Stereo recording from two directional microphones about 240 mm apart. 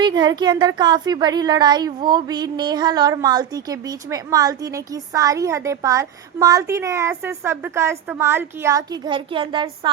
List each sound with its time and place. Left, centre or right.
0.0 s speech: centre